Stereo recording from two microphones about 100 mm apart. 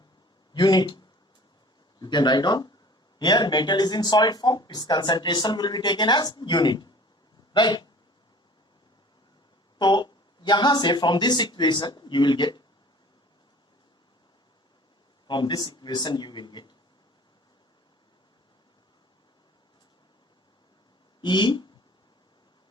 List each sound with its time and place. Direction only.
0.5 s speech: 45° left (ahead or behind)
9.7 s speech: 50° left (ahead or behind)
15.3 s speech: 50° left (ahead or behind)
21.2 s speech: 50° left (ahead or behind)